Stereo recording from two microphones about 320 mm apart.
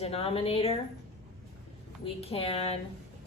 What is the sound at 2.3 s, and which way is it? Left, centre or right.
Speech, centre.